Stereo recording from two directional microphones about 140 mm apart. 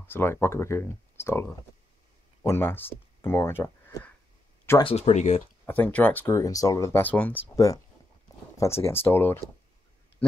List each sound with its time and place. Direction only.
0.0 s speech: 15° left (ahead or behind)
4.8 s speech: 50° left (ahead or behind)
5.7 s speech: 10° left (ahead or behind)
7.5 s speech: 25° left (ahead or behind)